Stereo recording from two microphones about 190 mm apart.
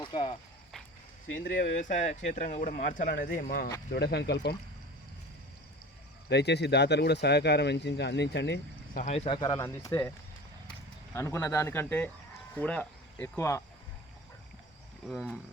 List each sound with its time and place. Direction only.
0.0 s speech: 25° left (ahead or behind)
1.4 s speech: 40° left (ahead or behind)
3.9 s speech: 60° left (ahead or behind)
6.2 s speech: 60° left (ahead or behind)
9.0 s speech: 40° left (ahead or behind)
9.4 s speech: 15° left (ahead or behind)
11.1 s speech: 15° left (ahead or behind)
15.0 s speech: centre (ahead or behind)